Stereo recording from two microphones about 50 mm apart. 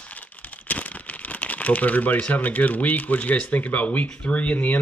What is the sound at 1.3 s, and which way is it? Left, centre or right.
Speech, left.